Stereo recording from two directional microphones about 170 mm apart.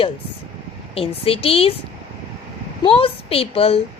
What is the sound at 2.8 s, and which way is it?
Speech, 35° left (ahead or behind).